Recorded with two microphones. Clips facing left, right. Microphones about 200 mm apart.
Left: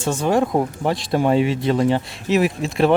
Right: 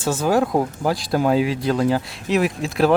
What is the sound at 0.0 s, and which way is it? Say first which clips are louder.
Speech: even; 5° right (ahead or behind).